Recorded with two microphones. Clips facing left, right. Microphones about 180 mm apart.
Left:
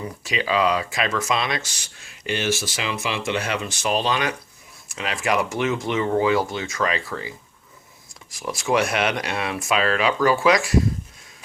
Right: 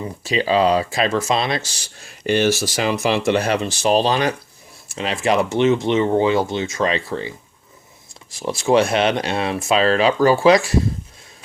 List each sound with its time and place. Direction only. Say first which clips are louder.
0.0 s speech: right 5 dB; 30° right (ahead or behind)